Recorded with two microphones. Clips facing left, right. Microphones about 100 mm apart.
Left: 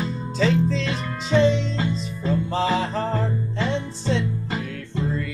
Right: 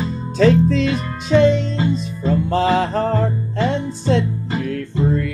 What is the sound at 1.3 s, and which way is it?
Music, 55° right (ahead or behind).